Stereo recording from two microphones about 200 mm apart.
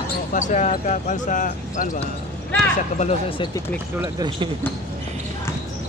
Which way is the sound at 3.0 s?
30° left (ahead or behind).